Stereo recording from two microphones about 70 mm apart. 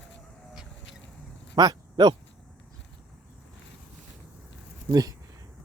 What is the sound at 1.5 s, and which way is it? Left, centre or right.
Speech, right.